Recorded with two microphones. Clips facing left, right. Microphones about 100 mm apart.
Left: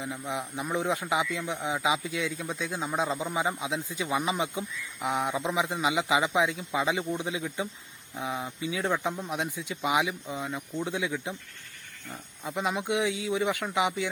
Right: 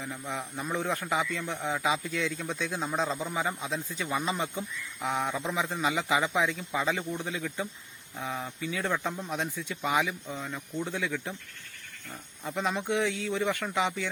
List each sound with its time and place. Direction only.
0.0 s a man's voice: 15° left (ahead or behind)
12.5 s a man's voice: 10° left (ahead or behind)